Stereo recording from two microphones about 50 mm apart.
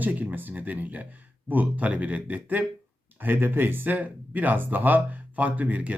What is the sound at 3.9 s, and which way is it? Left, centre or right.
Speech, right.